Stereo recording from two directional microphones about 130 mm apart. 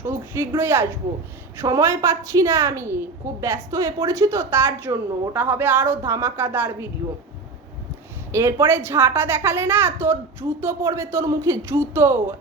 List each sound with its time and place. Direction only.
0.0 s a woman's voice: 20° right (ahead or behind)
8.3 s a woman's voice: 20° right (ahead or behind)